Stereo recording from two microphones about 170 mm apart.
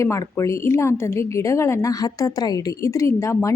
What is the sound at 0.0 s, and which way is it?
A woman's voice, 15° left (ahead or behind).